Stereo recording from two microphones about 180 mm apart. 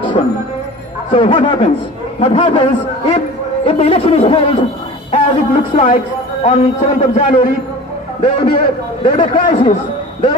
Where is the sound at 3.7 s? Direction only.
30° left (ahead or behind).